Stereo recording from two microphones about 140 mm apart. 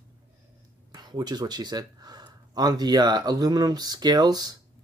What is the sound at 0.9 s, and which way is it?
Speech, 30° right (ahead or behind).